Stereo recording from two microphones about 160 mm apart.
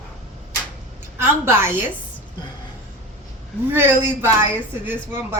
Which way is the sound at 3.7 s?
15° right (ahead or behind).